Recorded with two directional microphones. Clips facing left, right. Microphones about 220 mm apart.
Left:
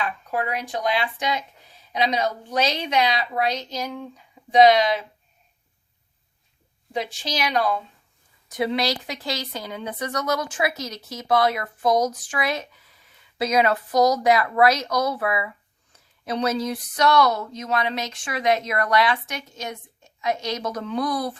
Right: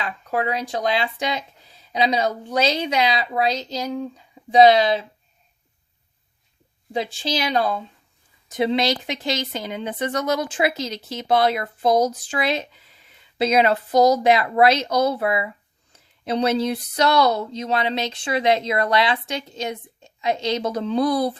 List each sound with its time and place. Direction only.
0.4 s speech: 30° right (ahead or behind)
6.9 s speech: 30° right (ahead or behind)